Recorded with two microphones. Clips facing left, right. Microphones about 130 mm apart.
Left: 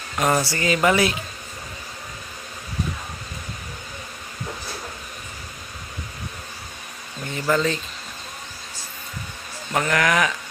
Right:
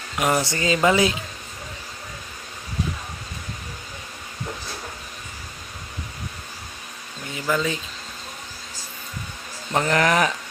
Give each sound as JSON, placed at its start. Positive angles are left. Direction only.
{"t": 0.2, "sound": "speech", "side_deg": -15}
{"t": 7.3, "sound": "speech", "side_deg": -10}
{"t": 9.8, "sound": "speech", "side_deg": -30}